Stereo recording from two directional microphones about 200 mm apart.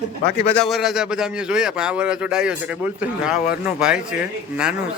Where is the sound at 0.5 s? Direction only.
Centre (ahead or behind).